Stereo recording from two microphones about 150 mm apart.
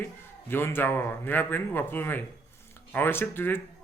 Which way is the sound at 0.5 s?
15° left (ahead or behind).